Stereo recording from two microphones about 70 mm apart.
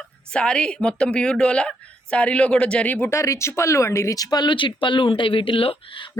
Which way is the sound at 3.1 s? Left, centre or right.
Left.